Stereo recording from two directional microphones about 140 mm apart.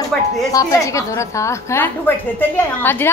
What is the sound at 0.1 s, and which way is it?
Speech, 5° left (ahead or behind).